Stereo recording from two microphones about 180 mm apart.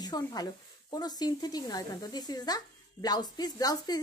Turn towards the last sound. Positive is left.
turn(degrees=20)  # may be behind; listen again after turning